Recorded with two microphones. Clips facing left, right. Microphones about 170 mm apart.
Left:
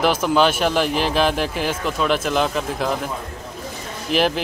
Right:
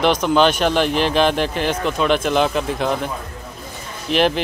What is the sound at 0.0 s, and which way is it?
Speech, 5° left (ahead or behind).